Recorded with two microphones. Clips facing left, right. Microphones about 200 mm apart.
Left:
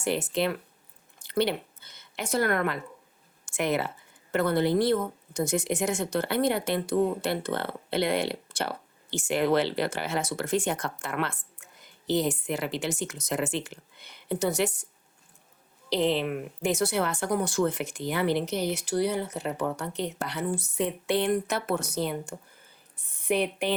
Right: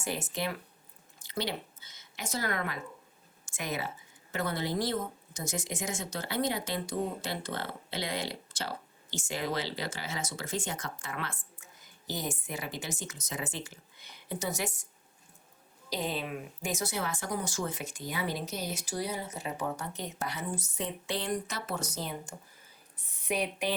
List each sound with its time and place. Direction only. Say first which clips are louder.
0.0 s speech: left 8 dB; 65° left (ahead or behind)
15.9 s speech: left 9 dB; 70° left (ahead or behind)